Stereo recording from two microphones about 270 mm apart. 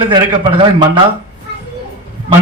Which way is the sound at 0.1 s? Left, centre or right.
Centre.